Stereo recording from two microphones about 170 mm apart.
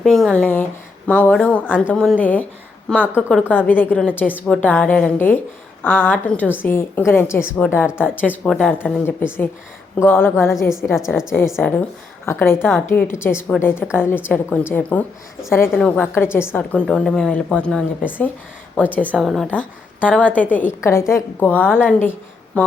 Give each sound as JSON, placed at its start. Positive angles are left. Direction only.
{"t": 0.0, "sound": "a woman's voice", "side_deg": 0}
{"t": 10.5, "sound": "a woman's voice", "side_deg": 0}
{"t": 11.3, "sound": "a woman's voice", "side_deg": 15}
{"t": 19.2, "sound": "a woman's voice", "side_deg": 0}
{"t": 19.5, "sound": "a woman's voice", "side_deg": 10}
{"t": 22.5, "sound": "a sound", "side_deg": 10}